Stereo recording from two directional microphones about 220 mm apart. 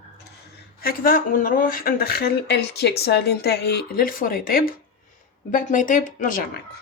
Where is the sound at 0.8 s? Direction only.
40° left (ahead or behind).